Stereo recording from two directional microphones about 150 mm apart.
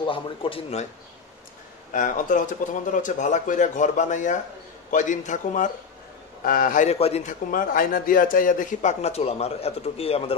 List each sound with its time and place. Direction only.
0.0 s speech: 35° left (ahead or behind)
1.9 s speech: 60° left (ahead or behind)
6.4 s a man's voice: 70° left (ahead or behind)
6.9 s a man's voice: 45° left (ahead or behind)
7.5 s speech: 70° left (ahead or behind); by 10.3 s 40° left (ahead or behind)